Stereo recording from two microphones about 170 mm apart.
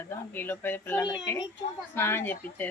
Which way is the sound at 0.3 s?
10° left (ahead or behind).